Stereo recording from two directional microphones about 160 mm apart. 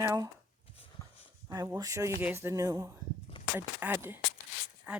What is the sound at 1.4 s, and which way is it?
Speech, 25° right (ahead or behind).